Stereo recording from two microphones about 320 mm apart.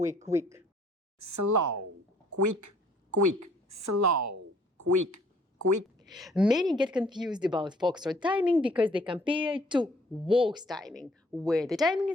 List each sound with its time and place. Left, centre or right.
0.0 s speech: right
0.3 s a woman's voice: centre
1.2 s a woman's voice: right
4.8 s a sound: right
6.1 s speech: centre
7.3 s a woman's voice: centre
8.6 s speech: centre
9.1 s a woman's voice: centre
10.7 s speech: centre